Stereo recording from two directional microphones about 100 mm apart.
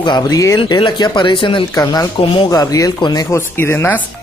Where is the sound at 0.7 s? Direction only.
50° left (ahead or behind).